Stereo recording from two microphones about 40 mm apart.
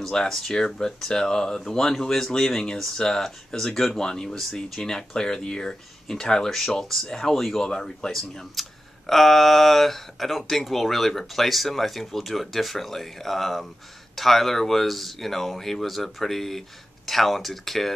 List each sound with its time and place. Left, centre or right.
0.0 s speech: centre
4.4 s speech: centre
8.5 s speech: centre